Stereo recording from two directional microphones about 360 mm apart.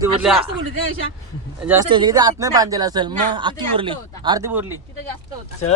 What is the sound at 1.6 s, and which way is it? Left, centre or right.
Speech, centre.